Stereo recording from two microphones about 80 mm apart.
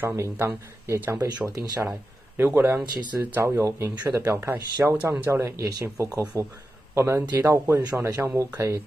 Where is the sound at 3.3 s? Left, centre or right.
Right.